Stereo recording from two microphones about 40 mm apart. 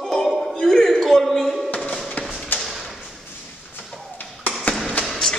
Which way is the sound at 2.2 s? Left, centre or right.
Left.